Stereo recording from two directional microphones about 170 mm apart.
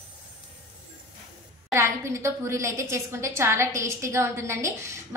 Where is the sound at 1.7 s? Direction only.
15° right (ahead or behind).